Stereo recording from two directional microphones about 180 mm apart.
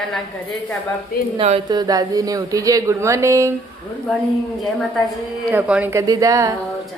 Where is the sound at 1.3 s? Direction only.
35° right (ahead or behind).